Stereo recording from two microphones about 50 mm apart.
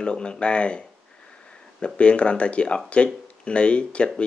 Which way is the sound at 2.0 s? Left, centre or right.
Left.